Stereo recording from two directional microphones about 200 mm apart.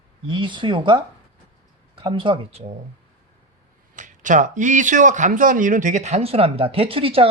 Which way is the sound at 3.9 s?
40° right (ahead or behind).